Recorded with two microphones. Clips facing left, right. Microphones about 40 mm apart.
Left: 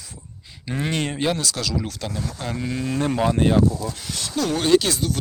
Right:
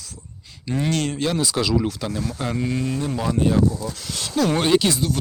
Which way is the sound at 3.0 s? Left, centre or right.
Left.